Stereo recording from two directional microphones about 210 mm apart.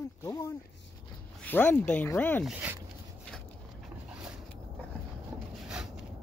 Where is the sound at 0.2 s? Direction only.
15° left (ahead or behind).